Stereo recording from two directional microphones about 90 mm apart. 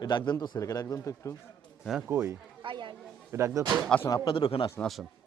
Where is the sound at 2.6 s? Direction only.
60° right (ahead or behind).